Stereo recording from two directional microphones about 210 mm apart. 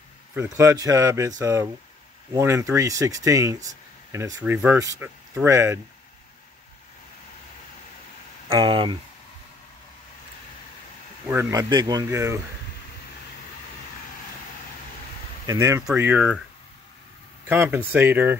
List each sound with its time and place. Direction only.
0.6 s speech: 15° right (ahead or behind)
8.5 s speech: 20° right (ahead or behind)
11.2 s speech: 10° right (ahead or behind)
15.4 s speech: 15° right (ahead or behind)
17.5 s speech: 10° right (ahead or behind)